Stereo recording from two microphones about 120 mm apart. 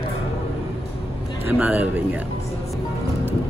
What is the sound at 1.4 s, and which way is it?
Speech, 15° right (ahead or behind).